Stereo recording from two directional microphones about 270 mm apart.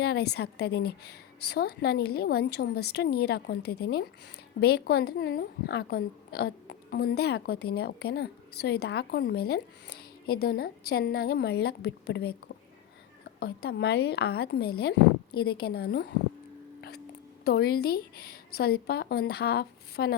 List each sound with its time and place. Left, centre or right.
0.0 s a woman's voice: left
13.4 s a woman's voice: left
17.4 s a woman's voice: left